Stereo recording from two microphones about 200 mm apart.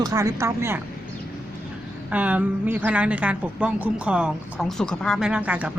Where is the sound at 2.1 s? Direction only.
10° right (ahead or behind).